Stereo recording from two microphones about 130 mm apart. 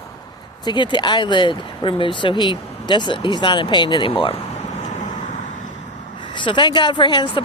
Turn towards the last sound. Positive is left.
turn(degrees=40)  # may be behind; listen again after turning